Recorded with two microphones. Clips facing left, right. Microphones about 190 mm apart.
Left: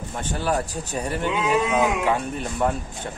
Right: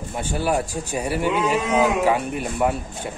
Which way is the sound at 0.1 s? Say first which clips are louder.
Right 2 dB; 10° right (ahead or behind).